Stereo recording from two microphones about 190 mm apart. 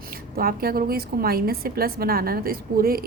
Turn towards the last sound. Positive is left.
turn(degrees=-50)  # may be behind; listen again after turning